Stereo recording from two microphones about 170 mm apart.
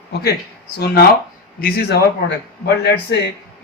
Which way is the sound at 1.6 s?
70° left (ahead or behind).